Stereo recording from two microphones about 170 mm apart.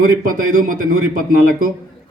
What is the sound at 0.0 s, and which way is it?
A man's voice, 55° right (ahead or behind).